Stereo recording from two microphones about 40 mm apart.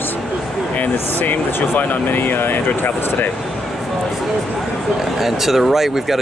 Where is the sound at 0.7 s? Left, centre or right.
Left.